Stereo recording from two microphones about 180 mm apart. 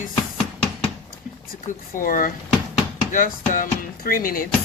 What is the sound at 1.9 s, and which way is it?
Speech, 50° left (ahead or behind).